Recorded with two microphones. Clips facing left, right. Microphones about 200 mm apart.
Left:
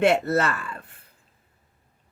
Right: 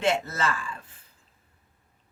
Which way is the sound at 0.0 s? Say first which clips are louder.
Left 6 dB; 60° left (ahead or behind).